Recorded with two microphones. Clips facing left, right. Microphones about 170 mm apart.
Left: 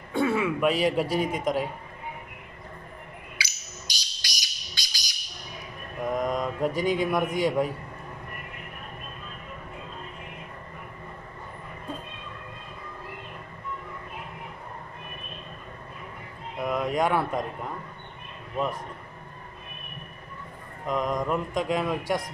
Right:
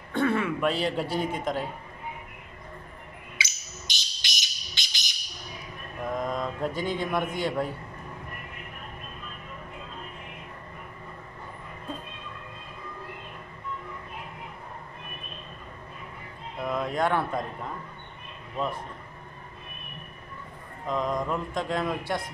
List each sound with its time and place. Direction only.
0.1 s a woman's voice: 10° left (ahead or behind)
3.3 s a sound: 20° right (ahead or behind)
6.1 s speech: 15° left (ahead or behind)
16.7 s speech: 15° left (ahead or behind)
20.9 s speech: 15° left (ahead or behind)